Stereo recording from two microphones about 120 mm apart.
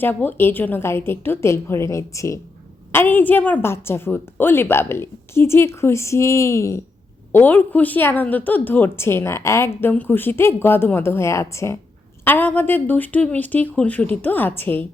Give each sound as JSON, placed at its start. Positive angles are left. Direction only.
{"t": 0.0, "sound": "a woman's voice", "side_deg": 15}